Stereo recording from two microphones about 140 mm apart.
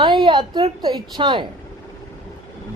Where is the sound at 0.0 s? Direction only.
35° right (ahead or behind).